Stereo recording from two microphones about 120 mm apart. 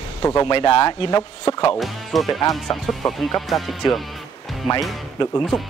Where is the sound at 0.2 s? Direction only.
30° left (ahead or behind).